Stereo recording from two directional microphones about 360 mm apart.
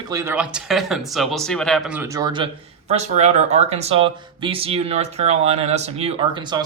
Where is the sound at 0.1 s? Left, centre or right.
Centre.